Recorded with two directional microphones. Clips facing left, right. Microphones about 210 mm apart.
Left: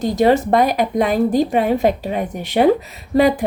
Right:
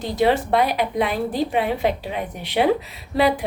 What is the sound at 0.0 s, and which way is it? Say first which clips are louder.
A woman's voice: left 5 dB; 45° left (ahead or behind).